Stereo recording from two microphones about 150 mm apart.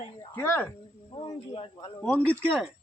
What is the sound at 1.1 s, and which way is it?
Speech, 45° left (ahead or behind).